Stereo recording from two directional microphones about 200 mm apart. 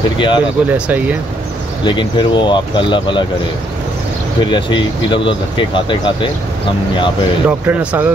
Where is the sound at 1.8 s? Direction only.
25° left (ahead or behind).